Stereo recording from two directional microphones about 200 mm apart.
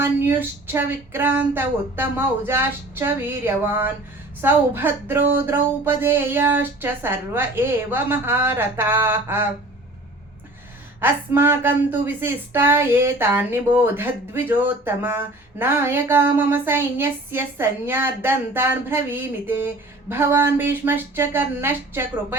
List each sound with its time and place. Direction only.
0.0 s speech: 10° right (ahead or behind)
11.0 s speech: 10° right (ahead or behind)